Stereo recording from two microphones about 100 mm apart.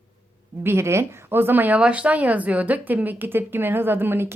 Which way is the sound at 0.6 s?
25° right (ahead or behind).